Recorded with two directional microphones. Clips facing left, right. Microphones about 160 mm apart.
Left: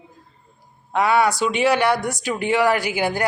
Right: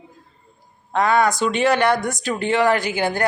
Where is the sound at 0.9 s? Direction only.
10° left (ahead or behind).